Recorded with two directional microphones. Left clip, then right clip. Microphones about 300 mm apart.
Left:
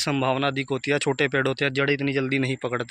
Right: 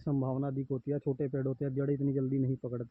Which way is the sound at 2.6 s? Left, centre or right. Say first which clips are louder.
Left 12 dB; centre.